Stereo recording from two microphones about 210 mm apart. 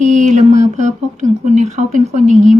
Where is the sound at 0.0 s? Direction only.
35° right (ahead or behind).